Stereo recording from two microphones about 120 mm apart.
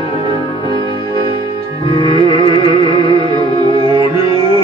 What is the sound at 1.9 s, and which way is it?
Music, 50° left (ahead or behind).